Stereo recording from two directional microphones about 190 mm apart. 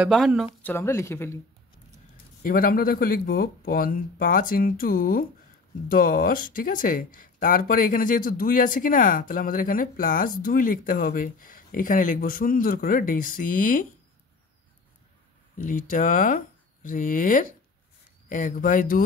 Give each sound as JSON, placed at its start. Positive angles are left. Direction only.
{"t": 0.0, "sound": "speech", "side_deg": 0}
{"t": 0.6, "sound": "speech", "side_deg": 10}
{"t": 2.4, "sound": "speech", "side_deg": 45}
{"t": 15.5, "sound": "speech", "side_deg": 45}